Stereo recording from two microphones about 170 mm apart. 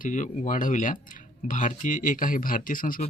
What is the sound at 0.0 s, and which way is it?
Speech, 45° left (ahead or behind).